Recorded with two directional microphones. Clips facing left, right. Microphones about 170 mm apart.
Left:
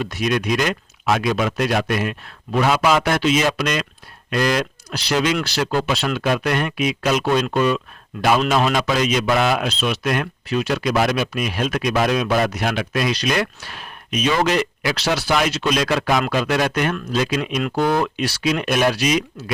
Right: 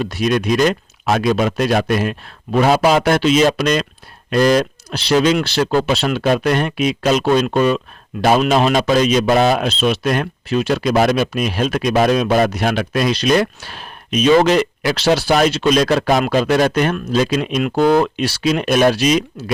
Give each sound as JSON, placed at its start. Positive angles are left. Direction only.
{"t": 0.0, "sound": "a man's voice", "side_deg": -30}
{"t": 4.9, "sound": "a man's voice", "side_deg": -25}
{"t": 12.6, "sound": "speech", "side_deg": -45}
{"t": 12.9, "sound": "a man's voice", "side_deg": -30}